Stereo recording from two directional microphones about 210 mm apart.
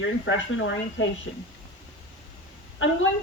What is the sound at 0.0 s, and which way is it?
A woman's voice, 65° left (ahead or behind).